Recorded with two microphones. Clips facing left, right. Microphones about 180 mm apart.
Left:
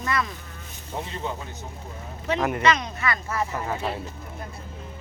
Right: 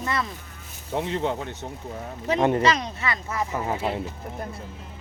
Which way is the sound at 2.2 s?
30° right (ahead or behind).